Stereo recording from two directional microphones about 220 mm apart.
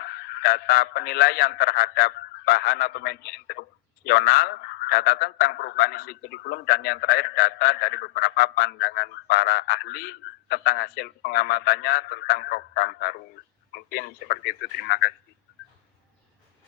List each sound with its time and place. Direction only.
0.0 s speech: 45° left (ahead or behind)